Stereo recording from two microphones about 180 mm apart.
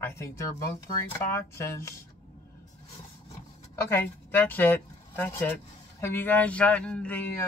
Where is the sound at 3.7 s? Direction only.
10° left (ahead or behind).